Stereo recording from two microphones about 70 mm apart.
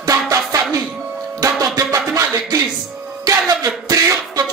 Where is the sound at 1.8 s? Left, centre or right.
Right.